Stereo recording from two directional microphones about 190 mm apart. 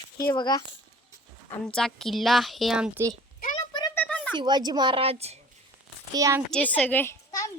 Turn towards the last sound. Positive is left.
turn(degrees=15)  # may be behind; listen again after turning